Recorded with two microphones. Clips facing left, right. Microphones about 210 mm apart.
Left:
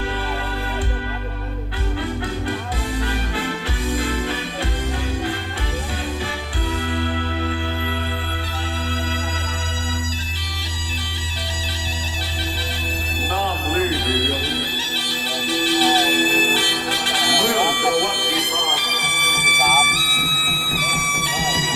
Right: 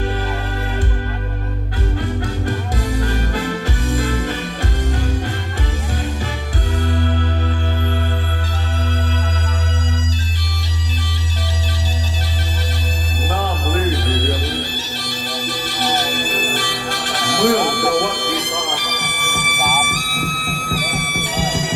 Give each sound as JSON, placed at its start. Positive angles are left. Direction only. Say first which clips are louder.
{"t": 3.0, "sound": "music", "louder": "right 3 dB", "side_deg": -45}
{"t": 6.8, "sound": "music", "louder": "right 5 dB", "side_deg": -45}
{"t": 15.0, "sound": "bagpipes", "louder": "right 1 dB", "side_deg": -45}
{"t": 17.2, "sound": "music", "louder": "right 5 dB", "side_deg": -45}